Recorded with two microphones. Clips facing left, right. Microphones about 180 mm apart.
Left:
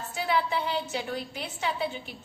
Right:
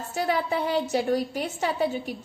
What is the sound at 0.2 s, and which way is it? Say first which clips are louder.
A woman's voice: right 3 dB; 45° right (ahead or behind).